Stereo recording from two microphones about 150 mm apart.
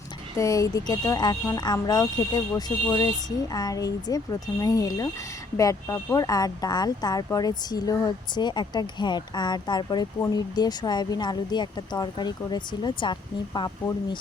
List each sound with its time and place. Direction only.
0.3 s speech: 20° left (ahead or behind)